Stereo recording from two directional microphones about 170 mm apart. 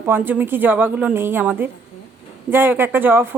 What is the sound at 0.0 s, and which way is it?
A woman's voice, 10° right (ahead or behind).